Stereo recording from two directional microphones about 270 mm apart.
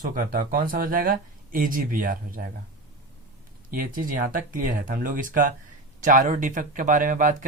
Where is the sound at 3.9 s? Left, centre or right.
Right.